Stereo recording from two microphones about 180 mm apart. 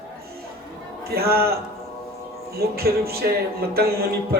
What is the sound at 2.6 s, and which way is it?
A man's voice, 60° right (ahead or behind).